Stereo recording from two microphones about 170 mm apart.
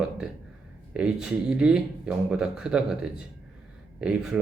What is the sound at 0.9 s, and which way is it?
Speech, 5° right (ahead or behind).